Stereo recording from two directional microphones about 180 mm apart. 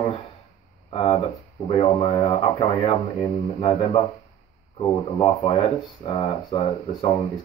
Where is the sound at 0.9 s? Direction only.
30° left (ahead or behind).